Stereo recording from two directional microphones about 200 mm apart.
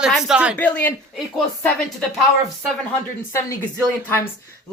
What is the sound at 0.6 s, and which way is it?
Speech, 10° left (ahead or behind).